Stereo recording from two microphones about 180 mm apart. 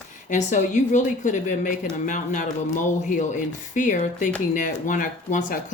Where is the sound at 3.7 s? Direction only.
45° left (ahead or behind).